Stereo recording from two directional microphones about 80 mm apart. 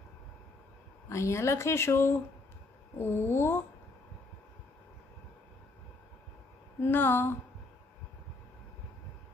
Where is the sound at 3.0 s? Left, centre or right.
Left.